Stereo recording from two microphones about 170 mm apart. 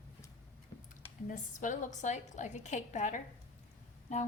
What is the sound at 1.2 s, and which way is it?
A woman's voice, 50° left (ahead or behind).